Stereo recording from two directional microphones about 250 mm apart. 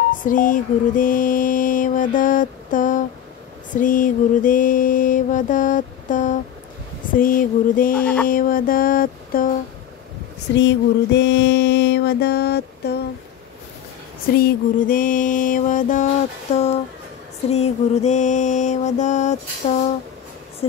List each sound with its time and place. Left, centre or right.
0.2 s mantra: left
8.0 s a sound: centre
8.3 s mantra: left
10.6 s mantra: left
14.4 s mantra: left
17.5 s mantra: left